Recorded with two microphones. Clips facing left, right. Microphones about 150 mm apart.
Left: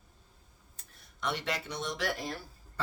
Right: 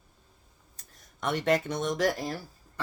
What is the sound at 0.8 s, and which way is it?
Speech, 45° right (ahead or behind).